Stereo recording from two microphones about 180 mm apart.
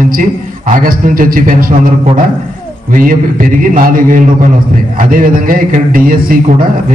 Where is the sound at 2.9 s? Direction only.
50° right (ahead or behind).